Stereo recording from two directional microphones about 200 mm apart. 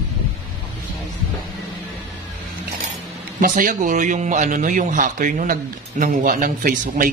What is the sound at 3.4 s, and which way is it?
Speech, 40° right (ahead or behind).